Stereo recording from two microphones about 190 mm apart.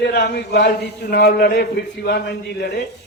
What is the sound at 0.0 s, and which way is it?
A man's voice, 60° left (ahead or behind).